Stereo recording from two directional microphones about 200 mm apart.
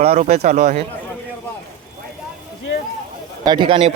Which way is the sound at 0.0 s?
35° right (ahead or behind).